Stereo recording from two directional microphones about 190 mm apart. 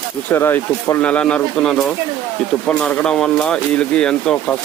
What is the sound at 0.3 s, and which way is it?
Speech, 10° left (ahead or behind).